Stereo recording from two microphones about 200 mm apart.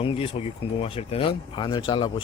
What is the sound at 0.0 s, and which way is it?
Speech, 25° left (ahead or behind).